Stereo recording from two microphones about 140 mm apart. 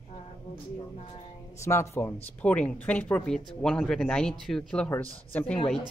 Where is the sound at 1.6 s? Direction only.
20° left (ahead or behind).